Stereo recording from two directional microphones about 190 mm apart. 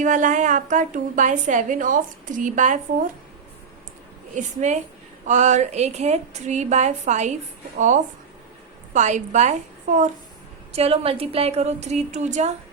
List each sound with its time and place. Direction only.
0.0 s a woman's voice: 40° right (ahead or behind)
4.4 s a woman's voice: 40° right (ahead or behind)